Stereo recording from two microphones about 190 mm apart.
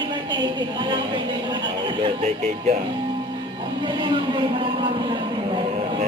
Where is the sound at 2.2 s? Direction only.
35° right (ahead or behind).